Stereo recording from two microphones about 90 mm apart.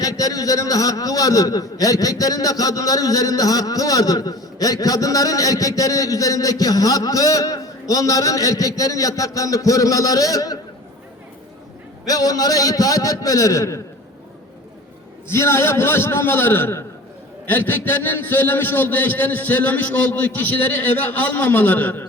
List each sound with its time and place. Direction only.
0.0 s a man's voice: 40° left (ahead or behind)
12.0 s a man's voice: 45° left (ahead or behind)
15.3 s a man's voice: 30° left (ahead or behind)